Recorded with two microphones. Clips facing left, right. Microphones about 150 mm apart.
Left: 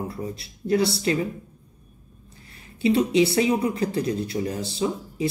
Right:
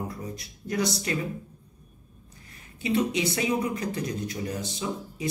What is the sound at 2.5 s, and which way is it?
Speech, 30° left (ahead or behind).